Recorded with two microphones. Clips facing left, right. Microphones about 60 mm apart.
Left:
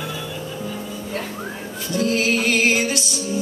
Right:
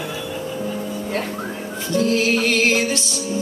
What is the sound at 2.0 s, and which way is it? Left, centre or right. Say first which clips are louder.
Music: right 2 dB; centre.